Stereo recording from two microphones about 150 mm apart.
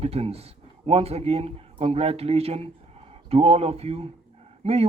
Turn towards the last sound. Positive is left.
turn(degrees=-45)  # may be behind; listen again after turning